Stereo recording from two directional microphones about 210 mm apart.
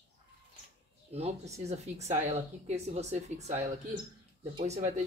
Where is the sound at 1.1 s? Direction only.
30° right (ahead or behind).